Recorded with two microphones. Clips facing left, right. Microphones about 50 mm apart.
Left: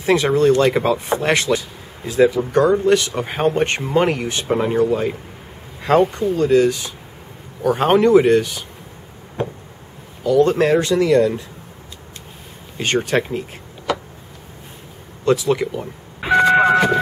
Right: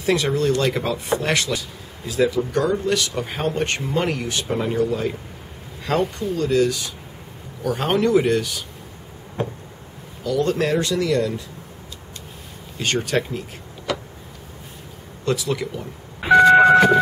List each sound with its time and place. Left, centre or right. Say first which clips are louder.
0.0 s speech: left 5 dB; centre
9.4 s a sound: left 2 dB; centre
10.2 s speech: left 6 dB; left
12.7 s speech: left 3 dB; left
15.2 s speech: left 6 dB; left
16.2 s vehicle: right 2 dB; centre